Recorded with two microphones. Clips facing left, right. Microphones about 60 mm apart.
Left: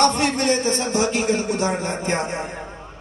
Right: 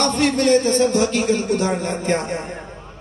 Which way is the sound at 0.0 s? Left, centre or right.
Centre.